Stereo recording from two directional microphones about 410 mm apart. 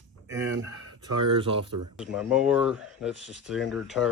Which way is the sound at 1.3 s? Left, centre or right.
Centre.